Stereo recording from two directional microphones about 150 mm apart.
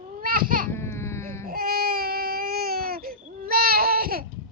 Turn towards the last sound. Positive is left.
turn(degrees=-75)  # may be behind; listen again after turning